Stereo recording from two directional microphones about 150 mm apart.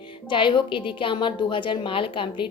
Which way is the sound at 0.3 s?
35° left (ahead or behind).